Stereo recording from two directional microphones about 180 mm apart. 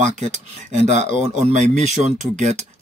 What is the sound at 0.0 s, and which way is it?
Speech, 40° right (ahead or behind).